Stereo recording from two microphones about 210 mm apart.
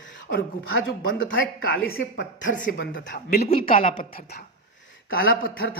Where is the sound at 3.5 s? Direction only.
40° left (ahead or behind).